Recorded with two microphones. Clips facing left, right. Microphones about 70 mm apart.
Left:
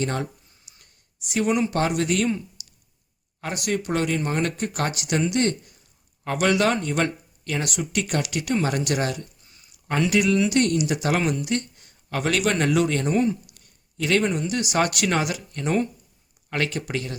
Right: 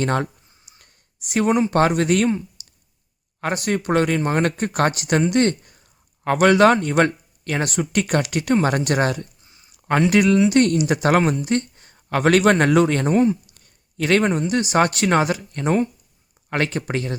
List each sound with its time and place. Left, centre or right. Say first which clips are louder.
0.0 s speech: right 5 dB; right